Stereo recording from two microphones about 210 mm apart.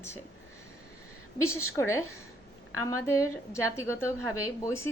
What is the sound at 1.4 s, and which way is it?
Speech, 90° left.